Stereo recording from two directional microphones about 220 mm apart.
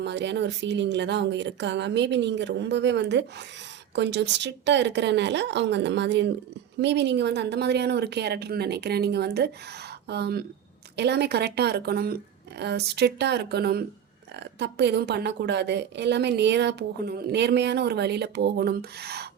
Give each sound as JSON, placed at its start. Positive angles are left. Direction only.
{"t": 0.0, "sound": "a woman's voice", "side_deg": -50}